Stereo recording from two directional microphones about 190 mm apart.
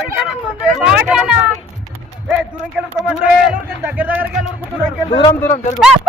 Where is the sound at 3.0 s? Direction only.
5° right (ahead or behind).